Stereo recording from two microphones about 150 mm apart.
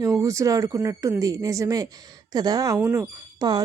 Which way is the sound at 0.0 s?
20° right (ahead or behind).